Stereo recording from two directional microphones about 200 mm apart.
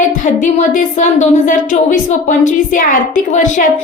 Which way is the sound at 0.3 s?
40° left (ahead or behind).